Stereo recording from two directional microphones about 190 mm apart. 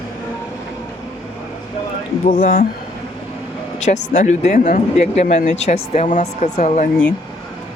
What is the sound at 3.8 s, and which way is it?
Speech, 40° left (ahead or behind).